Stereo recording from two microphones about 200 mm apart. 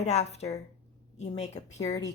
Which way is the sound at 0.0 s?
35° left (ahead or behind).